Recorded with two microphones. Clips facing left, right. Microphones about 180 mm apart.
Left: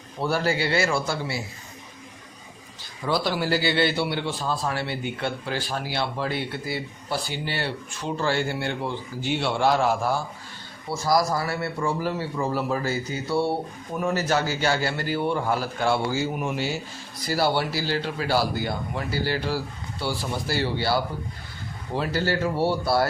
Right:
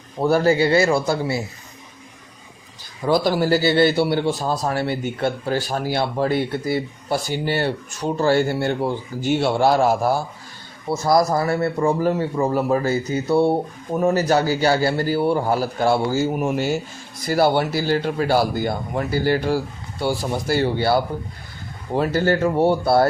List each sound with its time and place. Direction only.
0.2 s a man's voice: 45° right (ahead or behind)
3.0 s a man's voice: 45° right (ahead or behind)
11.0 s a man's voice: 60° right (ahead or behind)